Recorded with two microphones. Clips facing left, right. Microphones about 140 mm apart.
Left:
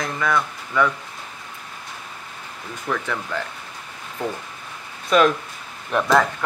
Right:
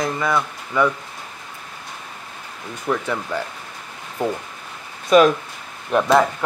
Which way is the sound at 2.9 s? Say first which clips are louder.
Right 3 dB; 20° right (ahead or behind).